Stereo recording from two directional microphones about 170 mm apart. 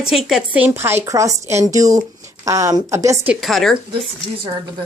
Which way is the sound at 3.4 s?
Centre (ahead or behind).